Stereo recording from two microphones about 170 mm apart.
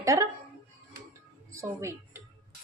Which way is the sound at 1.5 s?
15° right (ahead or behind).